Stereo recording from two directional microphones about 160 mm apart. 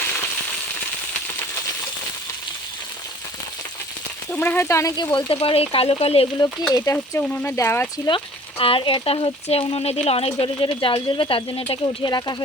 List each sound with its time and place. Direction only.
4.3 s speech: 10° left (ahead or behind); by 6.2 s 40° left (ahead or behind)
6.4 s speech: 25° left (ahead or behind)
8.0 s speech: 35° left (ahead or behind)